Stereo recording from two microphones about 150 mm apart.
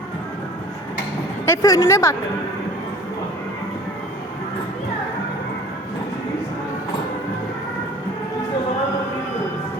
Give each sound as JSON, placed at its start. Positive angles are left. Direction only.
{"t": 1.5, "sound": "speech", "side_deg": 20}